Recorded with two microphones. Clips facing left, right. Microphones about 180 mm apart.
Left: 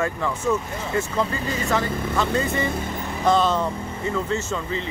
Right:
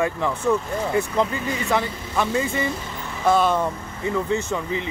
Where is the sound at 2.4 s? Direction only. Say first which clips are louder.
Even; 55° left (ahead or behind).